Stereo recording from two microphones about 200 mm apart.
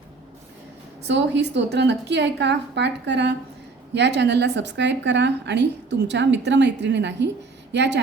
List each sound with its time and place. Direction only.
1.0 s a woman's voice: 60° right (ahead or behind)